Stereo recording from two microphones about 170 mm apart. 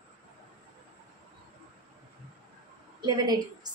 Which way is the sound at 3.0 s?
25° right (ahead or behind).